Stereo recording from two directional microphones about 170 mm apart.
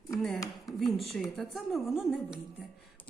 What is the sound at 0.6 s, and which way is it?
A woman's voice, centre (ahead or behind).